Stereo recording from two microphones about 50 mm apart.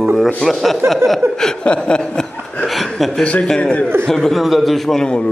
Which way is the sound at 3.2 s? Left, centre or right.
Left.